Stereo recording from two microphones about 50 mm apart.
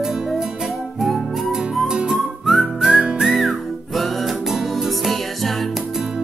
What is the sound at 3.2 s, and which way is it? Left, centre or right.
Music, centre.